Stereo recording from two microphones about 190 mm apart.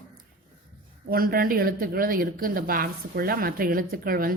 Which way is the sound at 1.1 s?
50° right (ahead or behind).